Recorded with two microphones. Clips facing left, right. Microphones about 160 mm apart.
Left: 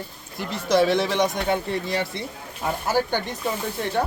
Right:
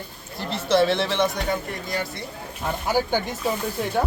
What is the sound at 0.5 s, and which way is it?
Speech, 10° left (ahead or behind).